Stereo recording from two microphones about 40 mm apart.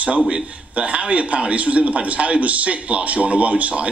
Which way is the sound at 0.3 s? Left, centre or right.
Right.